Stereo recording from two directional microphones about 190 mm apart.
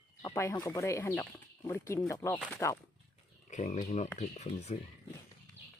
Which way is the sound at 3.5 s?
40° left (ahead or behind).